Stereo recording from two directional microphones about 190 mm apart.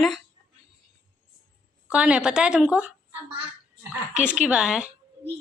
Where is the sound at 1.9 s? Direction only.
5° right (ahead or behind).